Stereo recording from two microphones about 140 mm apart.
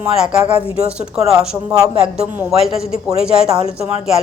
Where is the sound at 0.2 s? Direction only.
10° right (ahead or behind).